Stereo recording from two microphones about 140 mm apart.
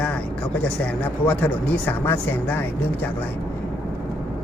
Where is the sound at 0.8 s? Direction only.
10° left (ahead or behind).